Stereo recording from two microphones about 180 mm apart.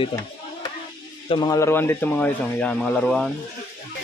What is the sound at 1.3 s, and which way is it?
Speech, 20° left (ahead or behind).